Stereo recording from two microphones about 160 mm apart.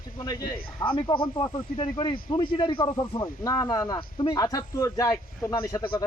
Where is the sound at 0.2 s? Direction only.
25° left (ahead or behind).